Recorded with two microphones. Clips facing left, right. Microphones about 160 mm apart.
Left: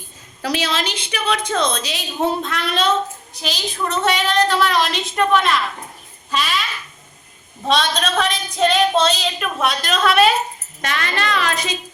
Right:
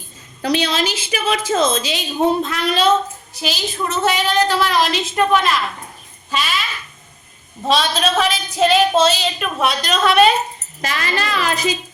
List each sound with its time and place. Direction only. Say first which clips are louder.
0.4 s speech: right 3 dB; 5° left (ahead or behind)
6.3 s a sound: even; 5° right (ahead or behind)
7.7 s speech: right 2 dB; 5° right (ahead or behind)